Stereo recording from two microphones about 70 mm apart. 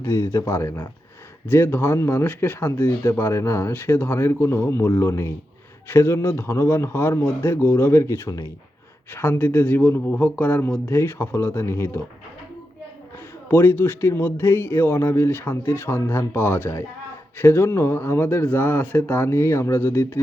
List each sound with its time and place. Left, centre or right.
0.0 s speech: left
9.1 s speech: left
13.5 s speech: left